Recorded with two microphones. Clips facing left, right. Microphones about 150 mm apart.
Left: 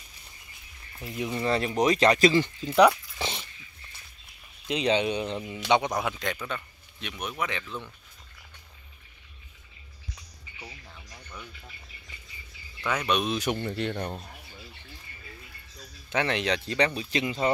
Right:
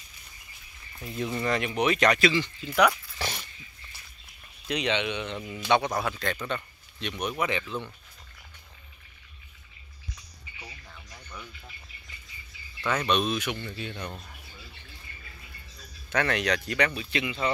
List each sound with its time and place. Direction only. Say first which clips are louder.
0.9 s speech: even; 10° left (ahead or behind)
1.4 s speech: left 3 dB; 30° left (ahead or behind)
2.1 s speech: left 4 dB; 45° left (ahead or behind)
2.7 s dog: left 4 dB; 25° left (ahead or behind)
4.6 s speech: left 3 dB; 30° left (ahead or behind)
5.7 s speech: even; 20° left (ahead or behind); by 7.9 s centre (ahead or behind)
10.6 s a sound: left 1 dB; 5° left (ahead or behind)
12.8 s speech: right 1 dB; 10° left (ahead or behind)
13.4 s speech: left 5 dB; 45° left (ahead or behind)
13.7 s speech: left 7 dB; 65° left (ahead or behind)
16.1 s speech: even; 20° left (ahead or behind); by 17.5 s 35° left (ahead or behind)